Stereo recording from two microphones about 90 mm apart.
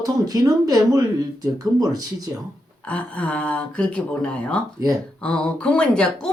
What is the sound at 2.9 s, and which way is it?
Speech, 15° left (ahead or behind).